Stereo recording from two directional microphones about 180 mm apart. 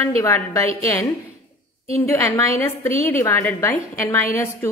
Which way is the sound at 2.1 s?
15° left (ahead or behind).